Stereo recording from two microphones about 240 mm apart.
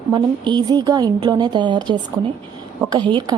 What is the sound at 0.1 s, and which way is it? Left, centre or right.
A woman's voice, centre.